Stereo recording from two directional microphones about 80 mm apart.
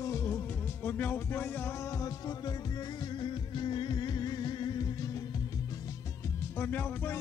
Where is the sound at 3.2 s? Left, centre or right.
Left.